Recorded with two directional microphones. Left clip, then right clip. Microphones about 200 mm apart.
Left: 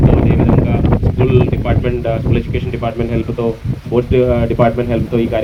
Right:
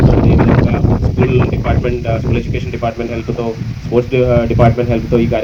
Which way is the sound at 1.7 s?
55° right (ahead or behind).